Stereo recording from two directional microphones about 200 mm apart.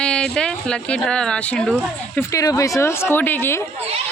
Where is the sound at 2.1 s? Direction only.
15° left (ahead or behind).